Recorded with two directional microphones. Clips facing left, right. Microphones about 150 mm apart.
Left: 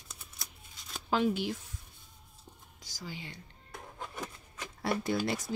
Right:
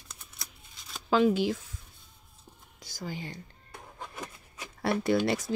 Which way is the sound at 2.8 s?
55° right (ahead or behind).